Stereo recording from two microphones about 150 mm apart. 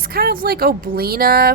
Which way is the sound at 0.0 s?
85° right.